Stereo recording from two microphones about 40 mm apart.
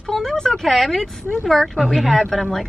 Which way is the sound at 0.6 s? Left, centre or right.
Centre.